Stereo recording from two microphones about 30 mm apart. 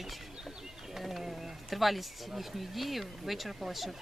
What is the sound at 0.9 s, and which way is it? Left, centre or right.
Mechanisms, centre.